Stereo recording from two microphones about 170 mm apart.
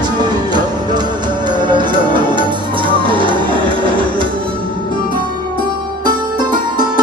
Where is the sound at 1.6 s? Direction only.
25° right (ahead or behind).